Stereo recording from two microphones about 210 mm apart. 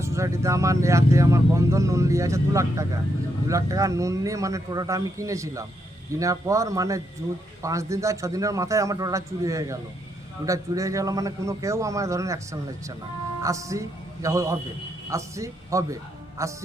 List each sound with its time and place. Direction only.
0.0 s speech: 15° right (ahead or behind)